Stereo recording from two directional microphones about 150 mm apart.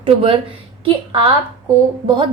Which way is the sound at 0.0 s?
40° right (ahead or behind).